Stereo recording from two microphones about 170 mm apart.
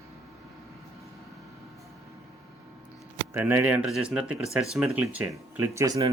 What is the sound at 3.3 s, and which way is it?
Speech, 15° right (ahead or behind).